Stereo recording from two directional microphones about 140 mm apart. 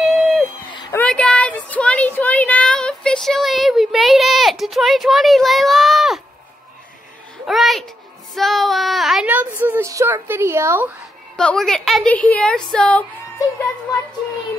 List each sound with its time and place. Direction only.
0.0 s a sound: centre (ahead or behind)
0.9 s speech: 10° left (ahead or behind)
7.4 s a woman's voice: centre (ahead or behind)
8.4 s child singing: centre (ahead or behind)
9.3 s a woman's voice: 15° right (ahead or behind)
11.3 s a woman's voice: 5° left (ahead or behind)